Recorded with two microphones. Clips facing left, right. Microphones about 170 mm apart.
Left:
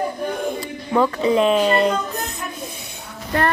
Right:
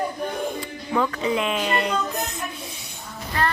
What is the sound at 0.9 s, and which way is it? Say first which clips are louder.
Speech: left 6 dB; 35° left (ahead or behind).